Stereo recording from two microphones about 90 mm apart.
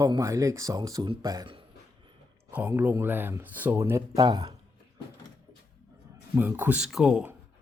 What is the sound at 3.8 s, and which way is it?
Speech, 30° right (ahead or behind).